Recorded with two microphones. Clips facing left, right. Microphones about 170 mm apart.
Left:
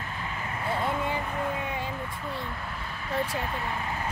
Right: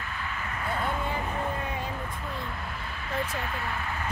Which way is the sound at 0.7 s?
25° left (ahead or behind).